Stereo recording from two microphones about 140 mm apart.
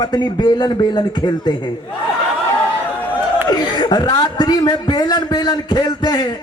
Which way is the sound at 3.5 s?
30° left (ahead or behind).